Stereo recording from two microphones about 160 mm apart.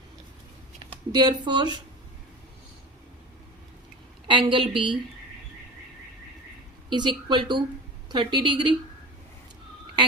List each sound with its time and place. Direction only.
0.9 s speech: 30° right (ahead or behind)
4.3 s a woman's voice: 30° right (ahead or behind)
6.9 s a woman's voice: 30° right (ahead or behind)